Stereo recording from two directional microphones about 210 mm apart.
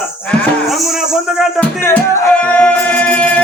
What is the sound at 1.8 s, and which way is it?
Music, 10° left (ahead or behind).